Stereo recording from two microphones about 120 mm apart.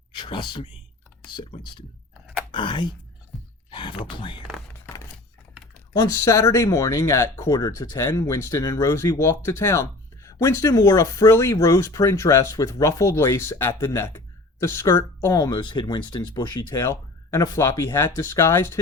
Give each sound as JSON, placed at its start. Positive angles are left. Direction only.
{"t": 0.1, "sound": "speech", "side_deg": 40}
{"t": 6.0, "sound": "speech", "side_deg": 25}
{"t": 15.4, "sound": "speech", "side_deg": 35}